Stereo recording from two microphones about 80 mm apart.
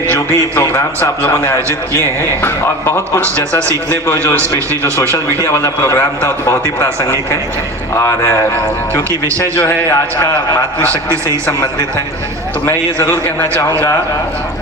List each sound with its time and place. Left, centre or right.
0.1 s a man's voice: left
5.4 s a man's voice: left
12.6 s a man's voice: left